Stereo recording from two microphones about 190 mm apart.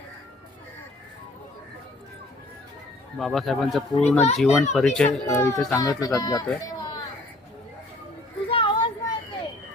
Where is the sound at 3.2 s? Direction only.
Centre (ahead or behind).